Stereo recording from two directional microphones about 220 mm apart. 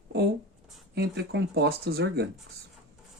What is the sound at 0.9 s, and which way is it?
Speech, 50° right (ahead or behind).